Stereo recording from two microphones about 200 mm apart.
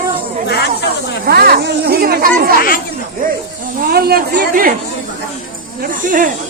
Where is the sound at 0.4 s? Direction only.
55° left (ahead or behind).